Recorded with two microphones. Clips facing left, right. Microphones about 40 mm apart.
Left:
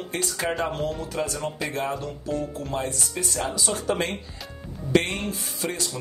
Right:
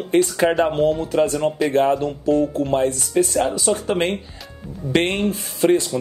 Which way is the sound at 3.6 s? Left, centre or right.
Right.